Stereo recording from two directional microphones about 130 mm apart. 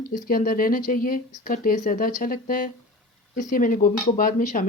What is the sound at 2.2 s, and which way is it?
Speech, 90° left.